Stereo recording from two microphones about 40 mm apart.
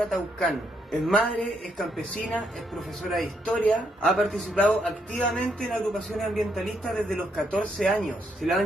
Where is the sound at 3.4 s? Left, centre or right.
Left.